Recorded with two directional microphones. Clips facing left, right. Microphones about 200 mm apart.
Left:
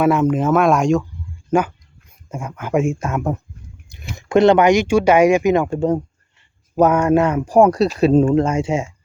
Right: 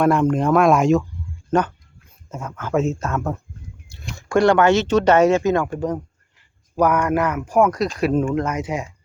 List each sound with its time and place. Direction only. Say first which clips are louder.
0.0 s speech: left 1 dB; 5° left (ahead or behind)
1.5 s speech: left 2 dB; 10° left (ahead or behind); by 8.9 s 25° left (ahead or behind)